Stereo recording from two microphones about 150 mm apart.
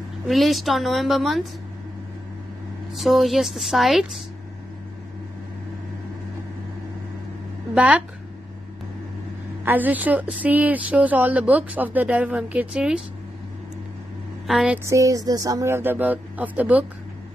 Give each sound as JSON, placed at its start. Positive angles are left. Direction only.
{"t": 0.3, "sound": "a woman's voice", "side_deg": 0}
{"t": 2.9, "sound": "a woman's voice", "side_deg": 0}
{"t": 7.7, "sound": "speech", "side_deg": -10}
{"t": 9.7, "sound": "a woman's voice", "side_deg": -10}
{"t": 14.5, "sound": "a woman's voice", "side_deg": -5}
{"t": 14.9, "sound": "a woman's voice", "side_deg": -20}